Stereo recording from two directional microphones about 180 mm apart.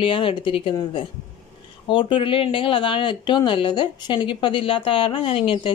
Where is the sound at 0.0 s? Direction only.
30° left (ahead or behind).